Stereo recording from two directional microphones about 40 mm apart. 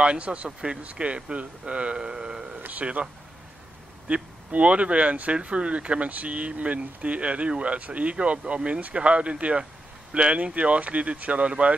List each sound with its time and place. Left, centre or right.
0.0 s speech: right
0.5 s speech: centre
2.0 s speech: right
2.8 s speech: right
4.1 s speech: right